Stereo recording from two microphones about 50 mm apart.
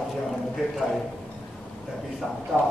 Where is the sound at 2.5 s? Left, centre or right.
Centre.